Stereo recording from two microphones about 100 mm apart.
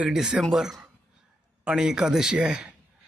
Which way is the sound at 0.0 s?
5° right (ahead or behind).